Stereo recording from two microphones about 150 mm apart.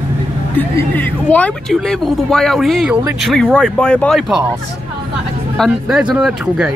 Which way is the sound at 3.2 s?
Centre (ahead or behind).